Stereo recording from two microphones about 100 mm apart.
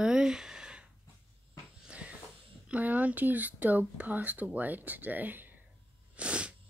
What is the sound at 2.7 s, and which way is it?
Speech, 15° right (ahead or behind).